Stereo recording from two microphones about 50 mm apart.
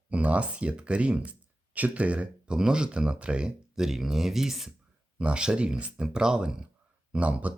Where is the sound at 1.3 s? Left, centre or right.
Right; by 4.7 s centre.